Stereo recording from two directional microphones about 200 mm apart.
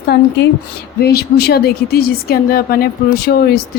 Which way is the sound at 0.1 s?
55° left (ahead or behind).